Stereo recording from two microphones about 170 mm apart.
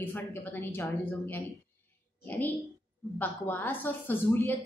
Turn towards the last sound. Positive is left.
turn(degrees=10)  # may be behind; listen again after turning